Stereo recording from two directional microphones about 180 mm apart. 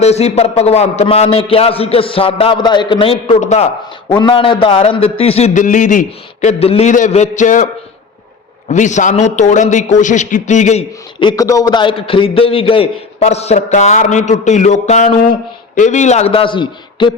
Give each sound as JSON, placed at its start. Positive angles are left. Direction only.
{"t": 0.0, "sound": "a man's voice", "side_deg": 35}
{"t": 4.1, "sound": "a man's voice", "side_deg": 25}
{"t": 11.2, "sound": "a man's voice", "side_deg": 20}